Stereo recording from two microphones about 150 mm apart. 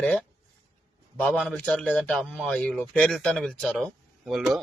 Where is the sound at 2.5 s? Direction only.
10° left (ahead or behind).